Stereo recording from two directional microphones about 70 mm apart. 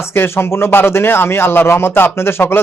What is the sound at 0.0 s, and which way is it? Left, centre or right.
Speech, left.